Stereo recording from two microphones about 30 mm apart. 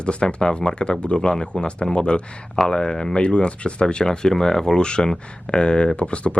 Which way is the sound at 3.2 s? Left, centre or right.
Left.